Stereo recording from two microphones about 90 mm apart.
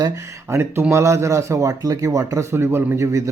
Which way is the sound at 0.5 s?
30° right (ahead or behind).